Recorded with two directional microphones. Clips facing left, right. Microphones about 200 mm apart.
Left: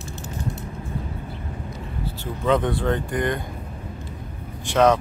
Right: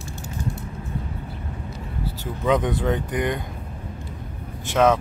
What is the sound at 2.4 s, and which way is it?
Speech, 10° right (ahead or behind).